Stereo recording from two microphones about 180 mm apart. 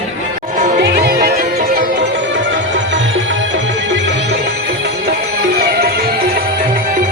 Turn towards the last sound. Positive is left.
turn(degrees=-60)  # may be behind; listen again after turning